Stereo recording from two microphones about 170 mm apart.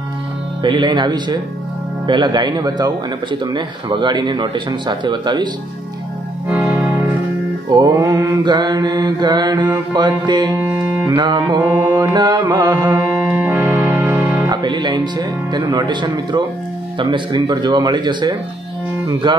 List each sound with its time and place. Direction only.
0.6 s speech: 30° right (ahead or behind)
6.5 s music: 10° right (ahead or behind)
7.7 s speech: 25° right (ahead or behind)
13.3 s music: 10° right (ahead or behind); by 16.4 s 25° right (ahead or behind)
17.0 s speech: 25° right (ahead or behind)